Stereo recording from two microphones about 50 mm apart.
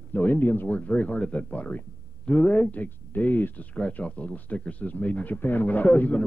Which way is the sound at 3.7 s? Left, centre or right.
Left.